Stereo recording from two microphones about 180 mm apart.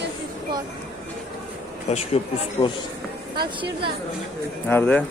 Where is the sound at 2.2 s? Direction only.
35° left (ahead or behind).